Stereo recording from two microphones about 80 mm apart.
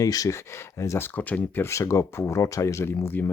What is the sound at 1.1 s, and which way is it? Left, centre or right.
Speech, left.